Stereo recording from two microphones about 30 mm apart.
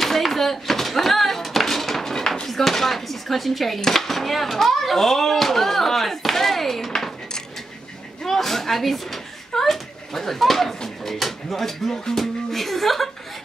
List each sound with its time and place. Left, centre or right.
0.2 s a sound: centre
2.4 s speech: centre
8.3 s speech: centre
11.9 s speech: centre
12.4 s speech: centre